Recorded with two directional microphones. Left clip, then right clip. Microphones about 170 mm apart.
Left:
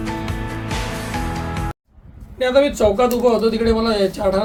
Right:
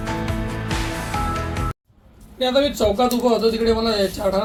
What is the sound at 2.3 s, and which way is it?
A man's voice, 15° left (ahead or behind).